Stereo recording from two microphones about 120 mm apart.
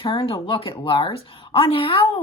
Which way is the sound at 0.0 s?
45° left (ahead or behind).